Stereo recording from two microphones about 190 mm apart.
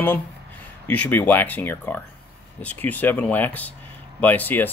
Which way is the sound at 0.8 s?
5° left (ahead or behind).